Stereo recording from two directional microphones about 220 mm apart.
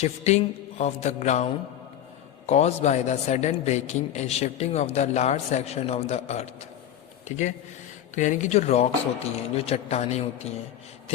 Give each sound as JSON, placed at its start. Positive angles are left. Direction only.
{"t": 0.0, "sound": "music", "side_deg": 30}
{"t": 2.5, "sound": "a man's voice", "side_deg": 30}
{"t": 8.1, "sound": "music", "side_deg": 35}
{"t": 9.6, "sound": "a man's voice", "side_deg": 30}